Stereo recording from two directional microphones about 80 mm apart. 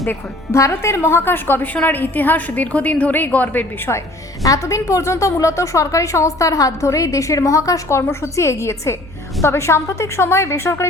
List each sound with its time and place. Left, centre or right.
0.1 s a woman's voice: left
4.4 s a woman's voice: left